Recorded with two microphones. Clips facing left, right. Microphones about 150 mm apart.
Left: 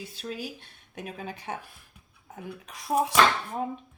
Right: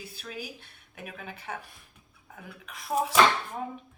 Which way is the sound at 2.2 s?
35° left (ahead or behind).